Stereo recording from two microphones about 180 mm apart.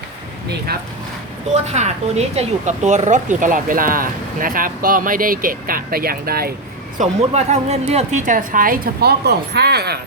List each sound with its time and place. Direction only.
1.6 s speech: 40° right (ahead or behind); by 6.5 s 55° right (ahead or behind)
7.0 s speech: 40° right (ahead or behind); by 10.0 s 65° right (ahead or behind)